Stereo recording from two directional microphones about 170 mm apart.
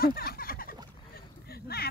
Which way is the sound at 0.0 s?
60° left (ahead or behind).